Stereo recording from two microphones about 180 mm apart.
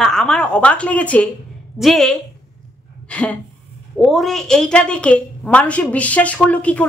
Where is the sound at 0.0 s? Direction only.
5° left (ahead or behind).